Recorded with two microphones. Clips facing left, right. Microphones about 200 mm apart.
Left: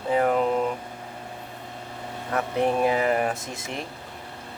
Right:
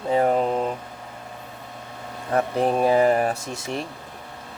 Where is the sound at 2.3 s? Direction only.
35° right (ahead or behind).